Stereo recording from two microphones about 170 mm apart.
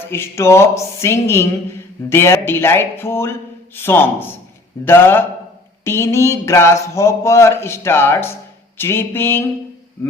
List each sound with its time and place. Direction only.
0.1 s speech: 15° left (ahead or behind)